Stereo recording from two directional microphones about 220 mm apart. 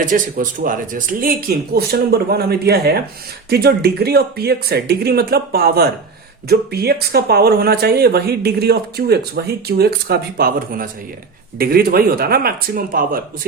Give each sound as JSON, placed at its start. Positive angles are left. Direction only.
{"t": 0.0, "sound": "speech", "side_deg": -40}